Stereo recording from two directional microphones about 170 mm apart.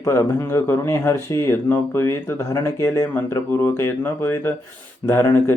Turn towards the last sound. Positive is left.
turn(degrees=15)  # may be behind; listen again after turning